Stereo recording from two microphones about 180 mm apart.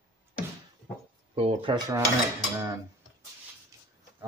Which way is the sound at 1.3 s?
30° right (ahead or behind).